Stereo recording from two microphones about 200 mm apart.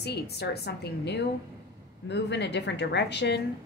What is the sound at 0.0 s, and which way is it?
A woman's voice, 55° left (ahead or behind).